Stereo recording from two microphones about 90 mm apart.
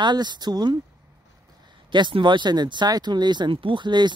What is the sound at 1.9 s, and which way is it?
Speech, 60° right (ahead or behind).